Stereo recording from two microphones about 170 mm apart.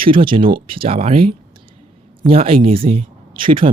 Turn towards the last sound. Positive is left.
turn(degrees=-30)  # may be behind; listen again after turning